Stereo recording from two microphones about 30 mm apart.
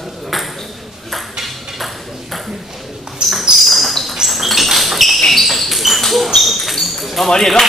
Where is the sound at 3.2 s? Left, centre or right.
Right.